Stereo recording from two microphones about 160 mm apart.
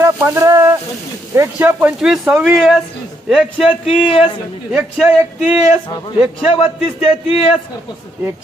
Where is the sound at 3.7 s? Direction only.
35° left (ahead or behind).